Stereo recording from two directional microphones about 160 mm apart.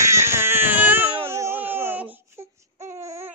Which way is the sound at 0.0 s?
15° right (ahead or behind).